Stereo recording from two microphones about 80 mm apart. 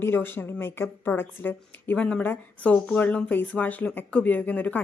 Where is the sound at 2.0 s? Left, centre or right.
Centre.